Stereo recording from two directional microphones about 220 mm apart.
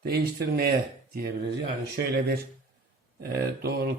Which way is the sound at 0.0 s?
45° right (ahead or behind).